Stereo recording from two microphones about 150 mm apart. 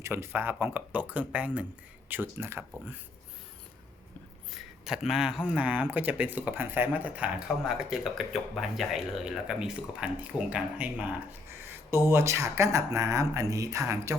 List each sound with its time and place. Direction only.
0.0 s speech: 15° right (ahead or behind)
4.5 s speech: 5° right (ahead or behind); by 14.2 s 20° right (ahead or behind)